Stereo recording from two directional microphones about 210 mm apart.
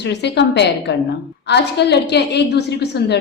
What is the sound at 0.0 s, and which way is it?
A woman's voice, 55° left (ahead or behind).